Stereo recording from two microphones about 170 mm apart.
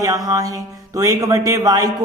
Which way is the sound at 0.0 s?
20° right (ahead or behind).